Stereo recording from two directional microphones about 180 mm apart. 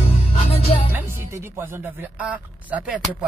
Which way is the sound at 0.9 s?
10° right (ahead or behind).